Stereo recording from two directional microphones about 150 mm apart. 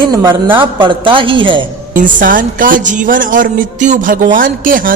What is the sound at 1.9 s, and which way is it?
A woman's voice, 65° right (ahead or behind).